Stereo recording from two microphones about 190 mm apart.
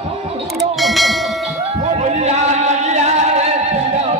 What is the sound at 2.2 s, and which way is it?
Music, 35° right (ahead or behind).